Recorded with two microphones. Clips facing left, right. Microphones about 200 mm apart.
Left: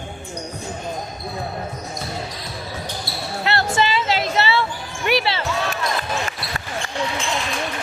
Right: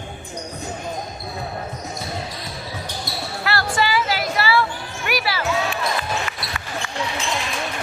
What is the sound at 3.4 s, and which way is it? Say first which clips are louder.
Music: left 2 dB; 25° left (ahead or behind).